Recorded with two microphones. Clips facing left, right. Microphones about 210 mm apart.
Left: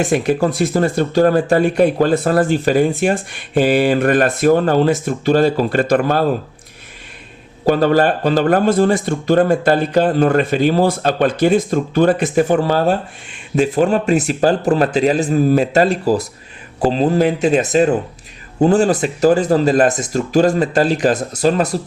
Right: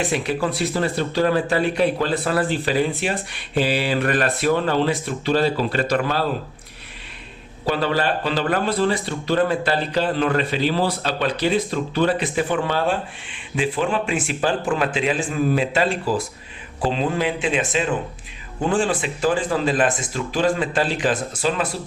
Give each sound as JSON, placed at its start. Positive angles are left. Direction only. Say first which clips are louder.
{"t": 0.0, "sound": "speech", "louder": "left 7 dB", "side_deg": 45}
{"t": 7.6, "sound": "speech", "louder": "left 8 dB", "side_deg": 45}